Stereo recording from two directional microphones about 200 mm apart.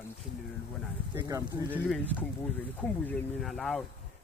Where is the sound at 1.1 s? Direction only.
15° right (ahead or behind).